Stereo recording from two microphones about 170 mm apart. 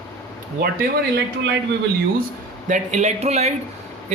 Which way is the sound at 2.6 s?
45° right (ahead or behind).